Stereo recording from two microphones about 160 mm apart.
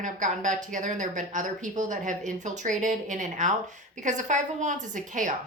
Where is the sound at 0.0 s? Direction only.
50° right (ahead or behind).